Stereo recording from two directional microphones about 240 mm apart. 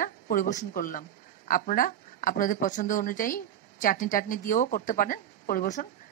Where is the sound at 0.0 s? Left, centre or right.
Left.